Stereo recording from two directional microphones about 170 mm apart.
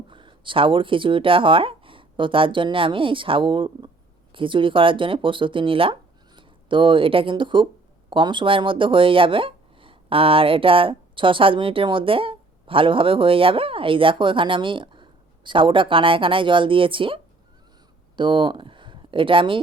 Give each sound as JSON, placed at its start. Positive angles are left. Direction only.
{"t": 0.1, "sound": "speech", "side_deg": -30}
{"t": 18.2, "sound": "speech", "side_deg": -30}